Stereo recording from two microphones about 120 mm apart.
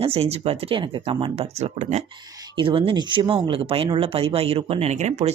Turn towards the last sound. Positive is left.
turn(degrees=-70)  # may be behind; listen again after turning